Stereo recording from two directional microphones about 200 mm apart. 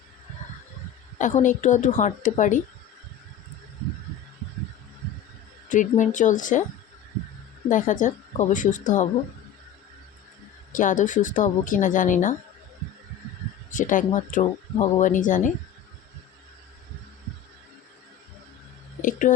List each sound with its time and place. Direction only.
1.2 s a woman's voice: 40° left (ahead or behind)
5.6 s a woman's voice: 40° left (ahead or behind)
7.7 s a woman's voice: 40° left (ahead or behind)
10.7 s a woman's voice: 40° left (ahead or behind)
13.7 s a woman's voice: 40° left (ahead or behind)